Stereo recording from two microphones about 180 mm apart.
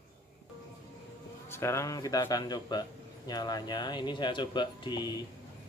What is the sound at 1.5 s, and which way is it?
Speech, 15° left (ahead or behind).